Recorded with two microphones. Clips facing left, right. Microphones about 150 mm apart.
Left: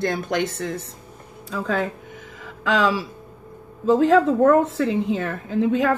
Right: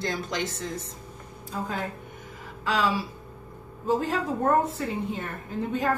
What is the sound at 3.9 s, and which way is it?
A woman's voice, 90° left.